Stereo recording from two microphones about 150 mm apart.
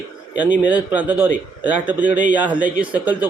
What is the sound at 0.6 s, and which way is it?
A man's voice, 10° right (ahead or behind).